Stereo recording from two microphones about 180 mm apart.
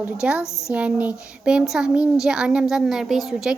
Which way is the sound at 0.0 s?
5° right (ahead or behind).